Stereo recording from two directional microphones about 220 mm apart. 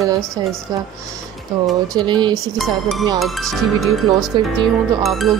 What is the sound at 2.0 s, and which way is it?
Speech, 20° right (ahead or behind).